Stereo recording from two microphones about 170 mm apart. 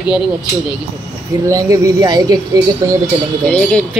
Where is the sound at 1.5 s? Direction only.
20° right (ahead or behind).